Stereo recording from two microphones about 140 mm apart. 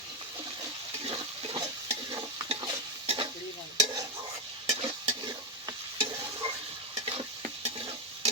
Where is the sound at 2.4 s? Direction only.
40° right (ahead or behind).